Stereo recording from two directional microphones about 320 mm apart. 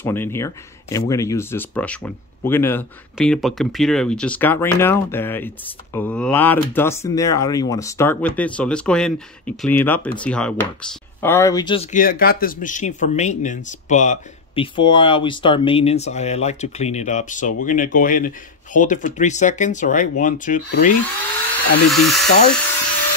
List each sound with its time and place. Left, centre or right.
0.0 s speech: centre; by 20.9 s left
21.9 s speech: centre